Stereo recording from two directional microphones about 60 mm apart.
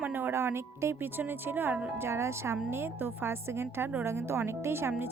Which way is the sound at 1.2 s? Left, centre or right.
Right.